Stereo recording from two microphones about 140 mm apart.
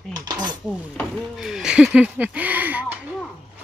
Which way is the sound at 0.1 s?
30° right (ahead or behind).